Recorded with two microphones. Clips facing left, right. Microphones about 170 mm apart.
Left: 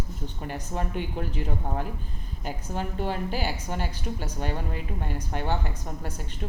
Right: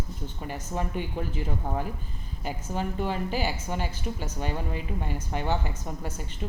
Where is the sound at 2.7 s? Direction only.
50° left (ahead or behind).